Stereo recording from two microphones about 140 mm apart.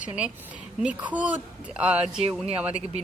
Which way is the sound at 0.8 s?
10° right (ahead or behind).